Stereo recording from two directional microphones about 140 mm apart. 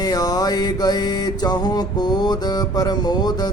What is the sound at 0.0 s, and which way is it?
Music, 25° left (ahead or behind).